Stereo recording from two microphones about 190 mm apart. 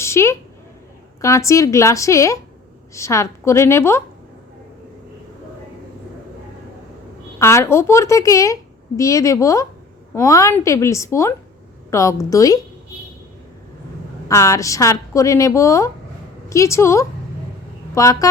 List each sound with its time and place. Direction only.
0.0 s a woman's voice: 15° left (ahead or behind)
7.3 s a woman's voice: 15° left (ahead or behind)
14.3 s a woman's voice: 15° left (ahead or behind)